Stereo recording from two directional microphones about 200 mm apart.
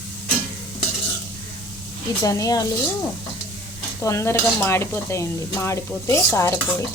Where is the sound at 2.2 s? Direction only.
15° left (ahead or behind).